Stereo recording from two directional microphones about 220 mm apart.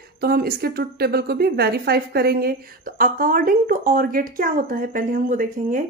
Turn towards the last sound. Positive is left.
turn(degrees=-35)  # may be behind; listen again after turning